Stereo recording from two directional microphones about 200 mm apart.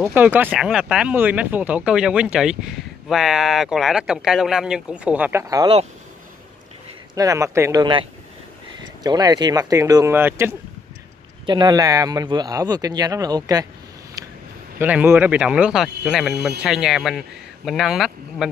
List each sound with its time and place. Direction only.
0.0 s speech: 10° right (ahead or behind)
7.2 s speech: 15° right (ahead or behind)
11.4 s speech: 20° right (ahead or behind)
14.8 s speech: 10° right (ahead or behind)